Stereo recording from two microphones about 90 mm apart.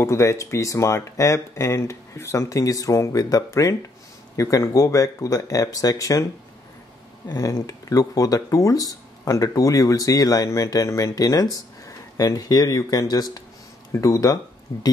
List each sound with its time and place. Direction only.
0.0 s speech: 35° left (ahead or behind)
7.2 s speech: 45° left (ahead or behind)